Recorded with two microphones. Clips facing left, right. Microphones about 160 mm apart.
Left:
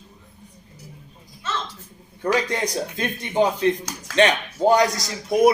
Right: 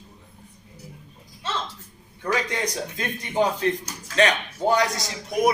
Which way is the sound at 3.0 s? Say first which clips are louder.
Left 2 dB; 25° left (ahead or behind).